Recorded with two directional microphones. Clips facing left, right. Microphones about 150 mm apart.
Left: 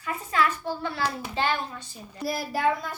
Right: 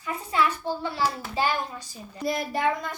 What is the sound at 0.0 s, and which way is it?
A child's voice, 20° right (ahead or behind).